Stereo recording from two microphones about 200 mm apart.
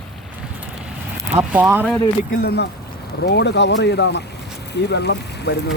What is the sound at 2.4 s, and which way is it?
Speech, 55° left (ahead or behind).